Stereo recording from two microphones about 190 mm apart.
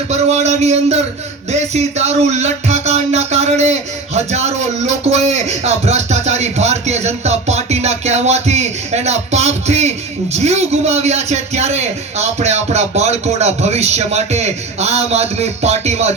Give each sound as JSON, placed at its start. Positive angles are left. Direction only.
{"t": 0.1, "sound": "speech", "side_deg": -35}